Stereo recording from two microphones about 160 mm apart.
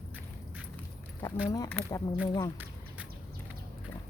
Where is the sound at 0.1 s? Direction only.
10° right (ahead or behind).